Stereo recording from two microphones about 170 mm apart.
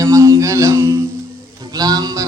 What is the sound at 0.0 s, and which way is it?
Music, 15° right (ahead or behind).